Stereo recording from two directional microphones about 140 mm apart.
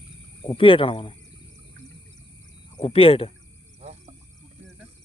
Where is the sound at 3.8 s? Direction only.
55° right (ahead or behind).